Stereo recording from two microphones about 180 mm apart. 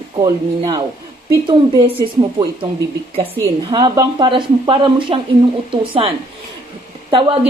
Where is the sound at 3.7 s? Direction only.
25° right (ahead or behind).